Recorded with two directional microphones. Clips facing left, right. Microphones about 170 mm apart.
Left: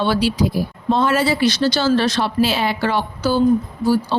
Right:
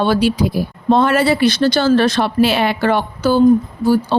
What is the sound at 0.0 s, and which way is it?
Speech, 50° right (ahead or behind).